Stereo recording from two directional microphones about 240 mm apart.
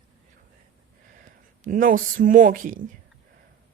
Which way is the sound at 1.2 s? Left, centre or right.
Right.